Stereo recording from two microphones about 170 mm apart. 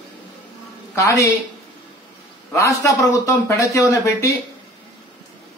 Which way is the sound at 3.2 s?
20° left (ahead or behind).